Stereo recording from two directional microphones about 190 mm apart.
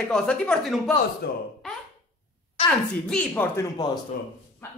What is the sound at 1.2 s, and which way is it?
Speech, 55° left (ahead or behind).